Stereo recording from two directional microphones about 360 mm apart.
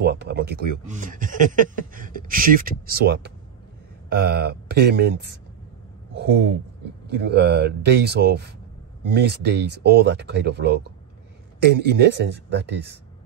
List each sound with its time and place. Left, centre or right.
0.0 s speech: right
7.1 s speech: right